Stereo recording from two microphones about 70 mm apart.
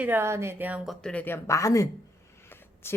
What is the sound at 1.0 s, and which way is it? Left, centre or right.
Speech, centre.